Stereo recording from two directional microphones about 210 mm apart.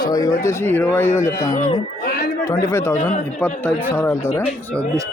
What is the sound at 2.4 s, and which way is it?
Speech, 15° left (ahead or behind).